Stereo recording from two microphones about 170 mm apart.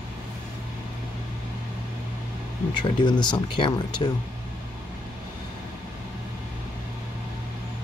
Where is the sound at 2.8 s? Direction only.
25° left (ahead or behind).